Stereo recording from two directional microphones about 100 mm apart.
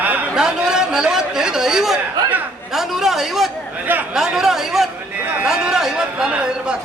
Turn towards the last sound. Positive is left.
turn(degrees=-10)  # may be behind; listen again after turning